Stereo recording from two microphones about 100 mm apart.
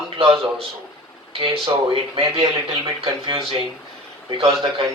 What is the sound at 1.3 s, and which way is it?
Speech, 65° right (ahead or behind).